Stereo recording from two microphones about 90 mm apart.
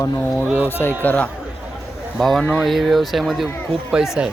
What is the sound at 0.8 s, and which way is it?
Speech, 20° left (ahead or behind).